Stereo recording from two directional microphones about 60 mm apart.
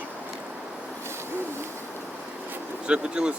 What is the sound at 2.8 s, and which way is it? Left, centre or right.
Speech, centre.